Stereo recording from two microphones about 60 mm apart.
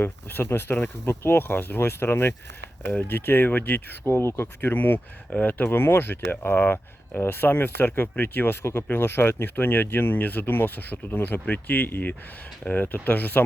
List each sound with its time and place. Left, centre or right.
0.0 s speech: left